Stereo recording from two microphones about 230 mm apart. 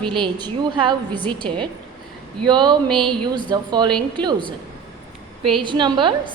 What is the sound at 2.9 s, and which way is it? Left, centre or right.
Speech, centre.